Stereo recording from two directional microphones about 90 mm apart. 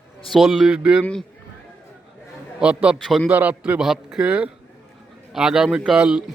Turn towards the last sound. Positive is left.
turn(degrees=-10)  # may be behind; listen again after turning